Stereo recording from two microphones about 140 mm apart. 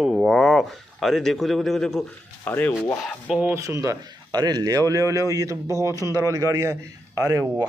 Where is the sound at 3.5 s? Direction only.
20° right (ahead or behind).